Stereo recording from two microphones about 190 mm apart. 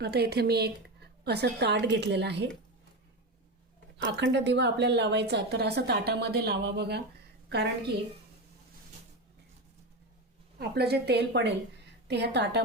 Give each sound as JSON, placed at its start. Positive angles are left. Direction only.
{"t": 0.0, "sound": "a woman's voice", "side_deg": -55}
{"t": 3.9, "sound": "a woman's voice", "side_deg": -70}
{"t": 10.6, "sound": "a woman's voice", "side_deg": -60}